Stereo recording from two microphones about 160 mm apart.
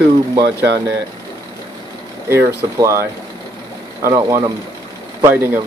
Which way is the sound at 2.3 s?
15° right (ahead or behind).